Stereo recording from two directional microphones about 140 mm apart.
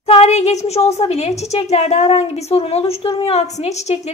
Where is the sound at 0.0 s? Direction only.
50° left (ahead or behind).